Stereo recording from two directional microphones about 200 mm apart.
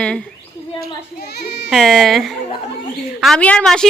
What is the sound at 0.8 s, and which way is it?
Speech, 50° left (ahead or behind).